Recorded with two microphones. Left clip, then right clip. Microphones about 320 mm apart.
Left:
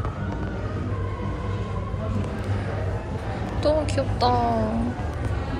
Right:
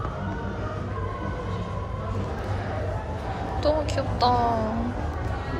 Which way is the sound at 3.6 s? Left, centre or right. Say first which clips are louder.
Left 2 dB; centre.